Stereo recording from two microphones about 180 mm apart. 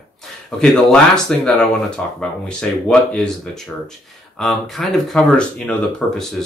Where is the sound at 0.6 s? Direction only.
5° left (ahead or behind).